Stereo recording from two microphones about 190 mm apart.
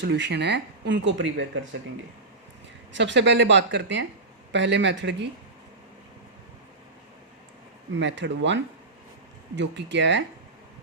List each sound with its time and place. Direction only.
0.0 s speech: 65° right (ahead or behind)
2.9 s speech: 70° right (ahead or behind)
7.9 s speech: 70° right (ahead or behind)